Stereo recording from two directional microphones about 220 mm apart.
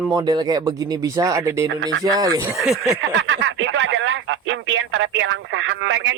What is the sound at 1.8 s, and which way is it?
Speech, 55° right (ahead or behind).